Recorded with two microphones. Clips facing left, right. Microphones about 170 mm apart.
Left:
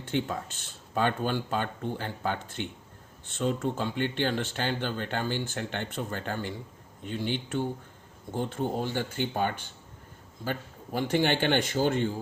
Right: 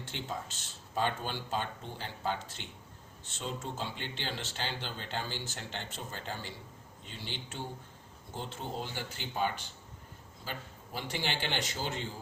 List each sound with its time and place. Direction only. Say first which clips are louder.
0.0 s speech: left 9 dB; 55° left (ahead or behind)